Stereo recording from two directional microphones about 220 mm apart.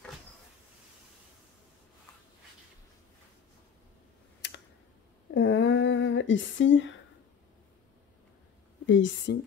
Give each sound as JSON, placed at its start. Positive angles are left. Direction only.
{"t": 4.4, "sound": "computer keyboard", "side_deg": 50}
{"t": 5.3, "sound": "a sound", "side_deg": 60}
{"t": 8.8, "sound": "speech", "side_deg": 60}